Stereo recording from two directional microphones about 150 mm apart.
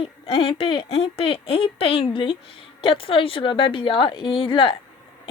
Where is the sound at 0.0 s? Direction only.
35° left (ahead or behind).